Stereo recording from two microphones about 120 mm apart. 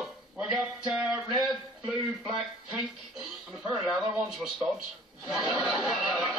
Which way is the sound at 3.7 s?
10° right (ahead or behind).